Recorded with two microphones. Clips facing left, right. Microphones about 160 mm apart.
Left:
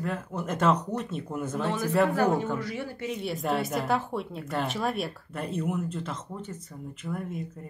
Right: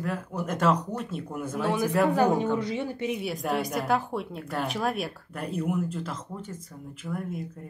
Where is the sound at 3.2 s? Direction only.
Centre (ahead or behind).